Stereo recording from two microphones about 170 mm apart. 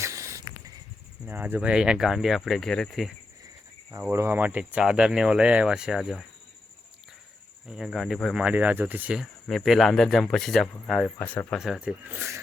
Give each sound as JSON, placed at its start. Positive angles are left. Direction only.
{"t": 0.0, "sound": "a sound", "side_deg": -15}
{"t": 1.3, "sound": "speech", "side_deg": -10}
{"t": 4.0, "sound": "speech", "side_deg": -15}
{"t": 7.7, "sound": "speech", "side_deg": 0}
{"t": 11.5, "sound": "speech", "side_deg": 0}